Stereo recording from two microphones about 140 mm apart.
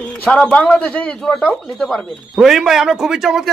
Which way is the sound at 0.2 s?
10° left (ahead or behind).